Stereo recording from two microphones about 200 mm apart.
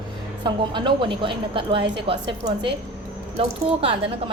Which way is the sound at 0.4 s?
25° right (ahead or behind).